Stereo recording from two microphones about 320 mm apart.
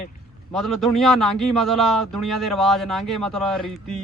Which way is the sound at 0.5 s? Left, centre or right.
Centre.